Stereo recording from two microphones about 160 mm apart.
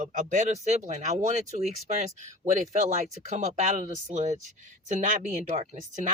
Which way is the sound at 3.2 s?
50° right (ahead or behind).